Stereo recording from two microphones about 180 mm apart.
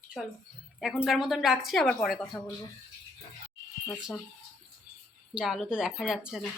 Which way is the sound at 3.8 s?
Centre (ahead or behind).